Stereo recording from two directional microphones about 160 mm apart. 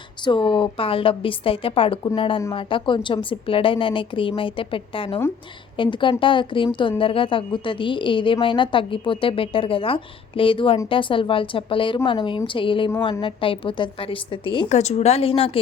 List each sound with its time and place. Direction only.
0.3 s a woman's voice: 30° left (ahead or behind)
14.7 s a woman's voice: 45° left (ahead or behind)